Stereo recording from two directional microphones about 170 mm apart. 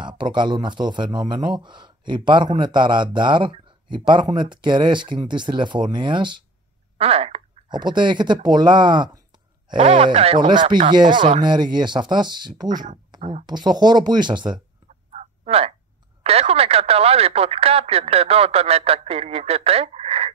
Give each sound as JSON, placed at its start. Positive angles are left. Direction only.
{"t": 0.0, "sound": "speech", "side_deg": -25}
{"t": 15.0, "sound": "a sound", "side_deg": -40}
{"t": 16.2, "sound": "speech", "side_deg": -35}